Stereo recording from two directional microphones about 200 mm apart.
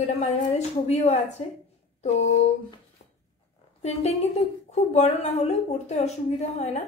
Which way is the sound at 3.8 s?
30° left (ahead or behind).